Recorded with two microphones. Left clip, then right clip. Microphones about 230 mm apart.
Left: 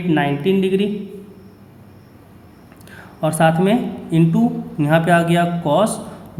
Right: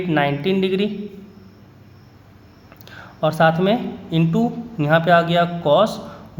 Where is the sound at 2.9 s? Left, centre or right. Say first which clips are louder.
Right 1 dB; centre.